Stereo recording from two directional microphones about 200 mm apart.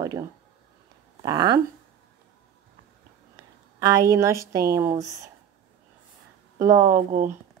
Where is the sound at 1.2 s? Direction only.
20° right (ahead or behind).